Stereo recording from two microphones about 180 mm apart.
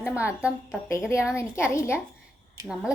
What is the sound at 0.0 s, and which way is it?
Speech, 5° right (ahead or behind).